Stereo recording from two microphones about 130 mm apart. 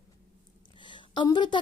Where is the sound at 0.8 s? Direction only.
40° left (ahead or behind).